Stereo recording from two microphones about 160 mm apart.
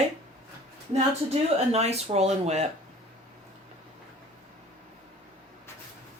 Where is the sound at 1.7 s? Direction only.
40° right (ahead or behind).